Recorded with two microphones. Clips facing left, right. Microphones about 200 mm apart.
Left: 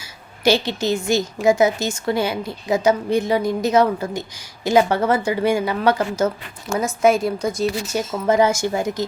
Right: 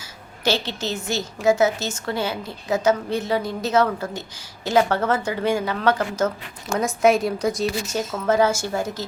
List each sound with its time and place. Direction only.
0.0 s a woman's voice: 15° left (ahead or behind)
7.9 s a woman's voice: 15° left (ahead or behind)